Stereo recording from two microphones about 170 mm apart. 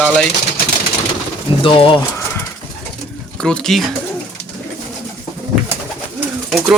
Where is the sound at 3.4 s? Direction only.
5° left (ahead or behind).